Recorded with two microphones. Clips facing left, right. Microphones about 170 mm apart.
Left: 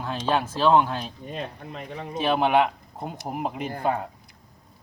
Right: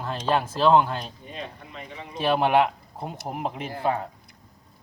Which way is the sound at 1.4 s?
45° left (ahead or behind).